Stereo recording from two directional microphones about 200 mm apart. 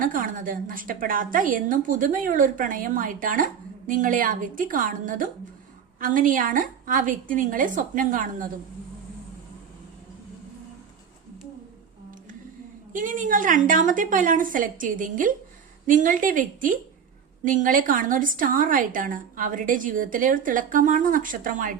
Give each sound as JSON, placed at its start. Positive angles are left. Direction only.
{"t": 0.0, "sound": "a woman's voice", "side_deg": -45}
{"t": 12.9, "sound": "a woman's voice", "side_deg": -40}